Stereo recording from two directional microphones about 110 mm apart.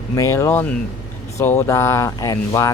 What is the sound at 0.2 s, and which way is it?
Speech, 30° left (ahead or behind).